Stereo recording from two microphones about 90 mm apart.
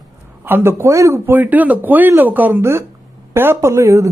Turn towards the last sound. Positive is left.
turn(degrees=-35)  # may be behind; listen again after turning